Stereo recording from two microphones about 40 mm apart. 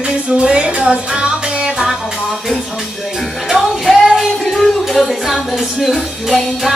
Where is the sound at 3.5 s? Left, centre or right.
Centre.